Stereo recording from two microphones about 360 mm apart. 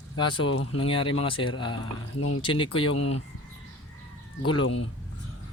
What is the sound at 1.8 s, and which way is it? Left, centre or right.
Speech, left.